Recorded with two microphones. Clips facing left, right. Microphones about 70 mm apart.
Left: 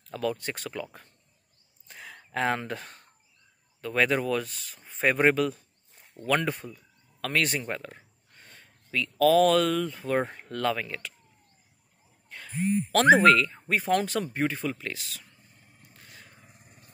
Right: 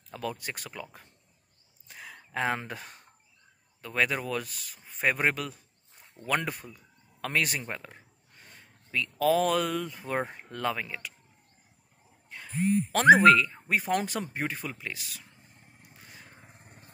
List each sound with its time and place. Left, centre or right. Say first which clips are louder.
0.1 s speech: left 5 dB; centre
1.9 s a sound: left 1 dB; centre
3.8 s speech: left 4 dB; centre
12.3 s a sound: right 1 dB; centre
13.0 s speech: right 1 dB; centre
15.2 s vehicle: right 1 dB; centre
16.3 s vehicle: right 2 dB; right